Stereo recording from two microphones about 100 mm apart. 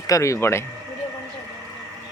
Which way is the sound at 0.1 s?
30° left (ahead or behind).